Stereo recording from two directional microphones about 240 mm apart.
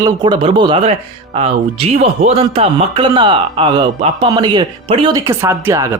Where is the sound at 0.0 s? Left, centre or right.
Centre.